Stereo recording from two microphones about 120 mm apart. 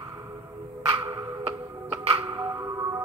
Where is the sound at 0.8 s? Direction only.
45° right (ahead or behind).